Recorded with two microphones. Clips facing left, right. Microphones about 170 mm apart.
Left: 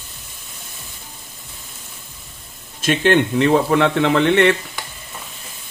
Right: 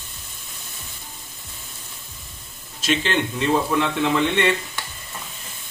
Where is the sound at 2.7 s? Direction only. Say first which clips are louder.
Left 7 dB; 55° left (ahead or behind).